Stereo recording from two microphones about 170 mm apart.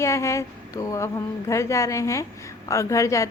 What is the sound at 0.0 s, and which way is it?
A woman's voice, 15° left (ahead or behind).